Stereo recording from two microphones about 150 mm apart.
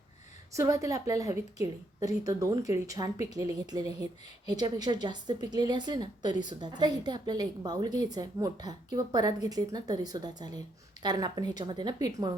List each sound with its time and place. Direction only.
0.5 s a woman's voice: 20° right (ahead or behind)